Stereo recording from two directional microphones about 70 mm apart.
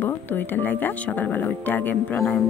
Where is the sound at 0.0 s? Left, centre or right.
Left.